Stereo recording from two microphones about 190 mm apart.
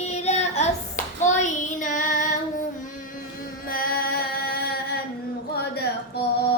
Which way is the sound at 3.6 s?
50° left (ahead or behind).